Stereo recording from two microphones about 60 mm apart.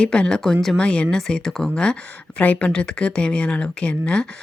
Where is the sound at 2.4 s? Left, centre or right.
Left.